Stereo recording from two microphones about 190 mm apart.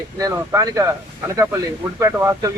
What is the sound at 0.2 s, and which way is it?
Speech, 20° right (ahead or behind).